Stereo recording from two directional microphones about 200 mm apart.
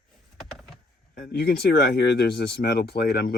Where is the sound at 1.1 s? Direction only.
50° left (ahead or behind).